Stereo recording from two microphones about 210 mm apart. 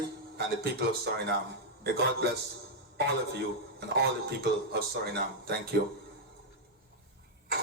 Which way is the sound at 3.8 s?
50° right (ahead or behind).